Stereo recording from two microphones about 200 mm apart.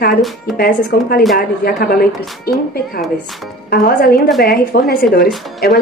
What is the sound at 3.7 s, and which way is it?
A woman's voice, 50° left (ahead or behind).